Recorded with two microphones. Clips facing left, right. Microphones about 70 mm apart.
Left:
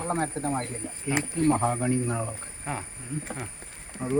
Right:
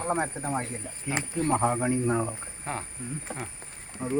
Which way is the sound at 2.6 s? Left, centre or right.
Centre.